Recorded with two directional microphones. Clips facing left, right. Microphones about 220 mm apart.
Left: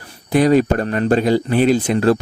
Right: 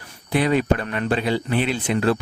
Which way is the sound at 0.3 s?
40° left (ahead or behind).